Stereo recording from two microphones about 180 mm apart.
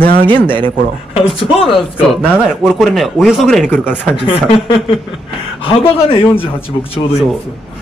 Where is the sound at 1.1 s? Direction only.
30° left (ahead or behind).